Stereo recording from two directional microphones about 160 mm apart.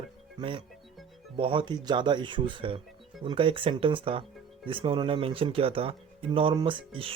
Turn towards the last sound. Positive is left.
turn(degrees=-30)  # may be behind; listen again after turning